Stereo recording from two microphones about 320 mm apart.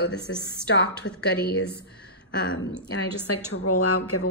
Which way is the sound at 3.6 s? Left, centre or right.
Left.